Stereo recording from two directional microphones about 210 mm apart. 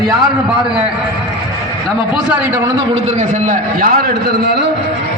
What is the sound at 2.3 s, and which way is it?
Speech, 10° right (ahead or behind).